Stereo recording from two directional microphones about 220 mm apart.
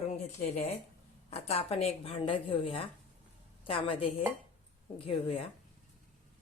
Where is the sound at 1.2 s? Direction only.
25° left (ahead or behind).